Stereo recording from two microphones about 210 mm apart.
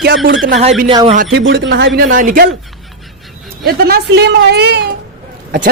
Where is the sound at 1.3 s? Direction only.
55° right (ahead or behind).